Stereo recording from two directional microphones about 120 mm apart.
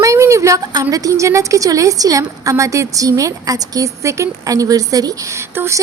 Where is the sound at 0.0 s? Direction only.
25° right (ahead or behind).